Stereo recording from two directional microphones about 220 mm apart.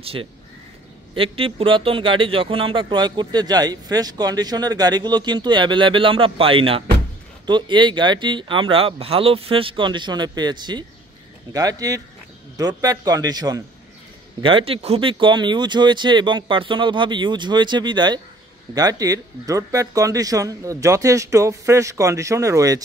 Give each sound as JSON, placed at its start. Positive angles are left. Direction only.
{"t": 0.0, "sound": "speech", "side_deg": -25}